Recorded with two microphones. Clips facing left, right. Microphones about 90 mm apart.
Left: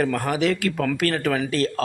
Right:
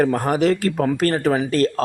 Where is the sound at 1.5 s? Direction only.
45° right (ahead or behind).